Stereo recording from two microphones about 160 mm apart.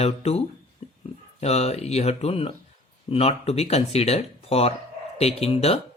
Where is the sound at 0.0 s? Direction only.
40° left (ahead or behind).